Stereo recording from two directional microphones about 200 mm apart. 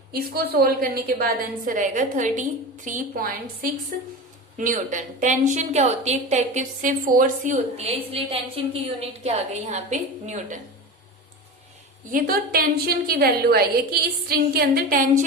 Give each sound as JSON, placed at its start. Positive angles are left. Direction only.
{"t": 0.1, "sound": "a woman's voice", "side_deg": -50}
{"t": 4.5, "sound": "a woman's voice", "side_deg": -40}
{"t": 12.1, "sound": "a woman's voice", "side_deg": -45}